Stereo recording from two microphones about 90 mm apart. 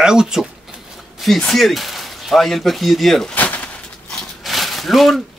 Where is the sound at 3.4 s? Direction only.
15° left (ahead or behind).